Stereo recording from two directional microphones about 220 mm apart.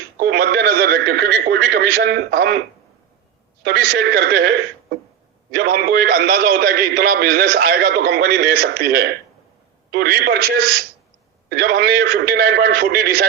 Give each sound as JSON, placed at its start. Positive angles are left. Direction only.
{"t": 0.2, "sound": "a man's voice", "side_deg": -45}
{"t": 3.6, "sound": "a man's voice", "side_deg": -45}